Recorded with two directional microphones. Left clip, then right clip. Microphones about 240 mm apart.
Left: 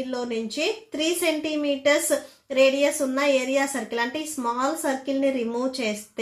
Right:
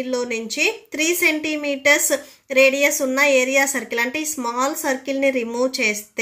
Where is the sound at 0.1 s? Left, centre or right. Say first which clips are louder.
Right 5 dB; right.